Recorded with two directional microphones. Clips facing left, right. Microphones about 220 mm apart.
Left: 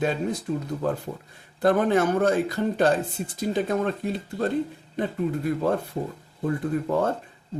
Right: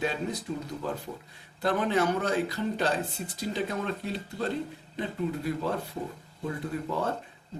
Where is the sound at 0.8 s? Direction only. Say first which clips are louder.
Left 7 dB; 50° left (ahead or behind).